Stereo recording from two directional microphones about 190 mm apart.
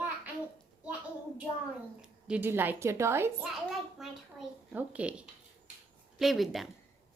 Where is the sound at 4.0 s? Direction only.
Centre (ahead or behind).